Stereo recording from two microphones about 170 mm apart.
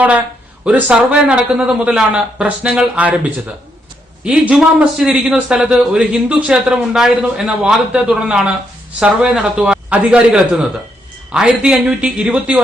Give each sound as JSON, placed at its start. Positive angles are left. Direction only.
{"t": 0.6, "sound": "a man's voice", "side_deg": -5}